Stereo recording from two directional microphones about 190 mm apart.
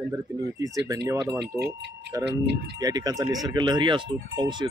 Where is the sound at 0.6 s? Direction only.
20° right (ahead or behind).